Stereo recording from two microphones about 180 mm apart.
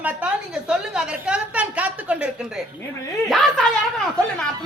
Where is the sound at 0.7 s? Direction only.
5° right (ahead or behind).